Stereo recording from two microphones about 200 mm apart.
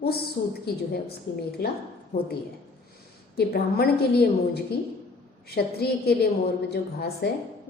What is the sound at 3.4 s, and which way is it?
A woman's voice, 50° left (ahead or behind).